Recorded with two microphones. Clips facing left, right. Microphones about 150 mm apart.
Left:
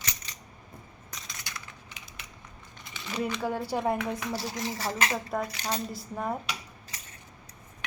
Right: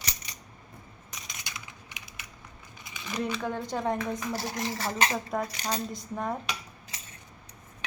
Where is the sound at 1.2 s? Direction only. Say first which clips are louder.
Right 1 dB; 15° right (ahead or behind).